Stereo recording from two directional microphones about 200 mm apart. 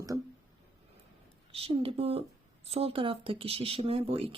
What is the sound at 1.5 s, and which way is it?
Speech, 30° right (ahead or behind).